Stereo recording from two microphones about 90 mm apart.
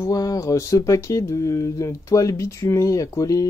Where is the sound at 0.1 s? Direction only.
40° left (ahead or behind).